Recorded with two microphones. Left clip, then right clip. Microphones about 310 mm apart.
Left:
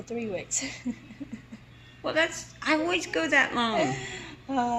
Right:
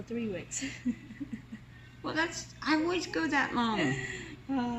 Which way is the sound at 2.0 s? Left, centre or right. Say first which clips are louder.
Left 6 dB; centre.